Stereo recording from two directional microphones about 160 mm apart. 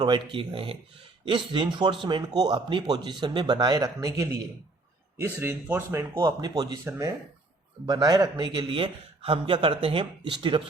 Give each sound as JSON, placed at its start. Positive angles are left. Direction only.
{"t": 0.0, "sound": "a man's voice", "side_deg": -30}